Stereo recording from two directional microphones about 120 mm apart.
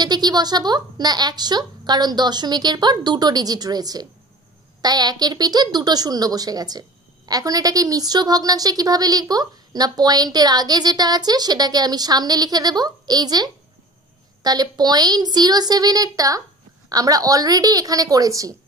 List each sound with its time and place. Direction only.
0.0 s a woman's voice: 35° right (ahead or behind)